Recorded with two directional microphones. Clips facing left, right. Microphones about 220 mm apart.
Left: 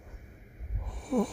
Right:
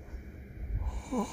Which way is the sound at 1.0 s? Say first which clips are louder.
Left 5 dB; 40° left (ahead or behind).